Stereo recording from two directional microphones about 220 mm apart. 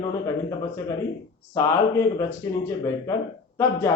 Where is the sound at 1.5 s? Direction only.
15° left (ahead or behind).